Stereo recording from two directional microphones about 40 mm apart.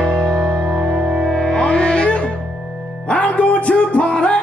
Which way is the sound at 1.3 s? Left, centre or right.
Centre.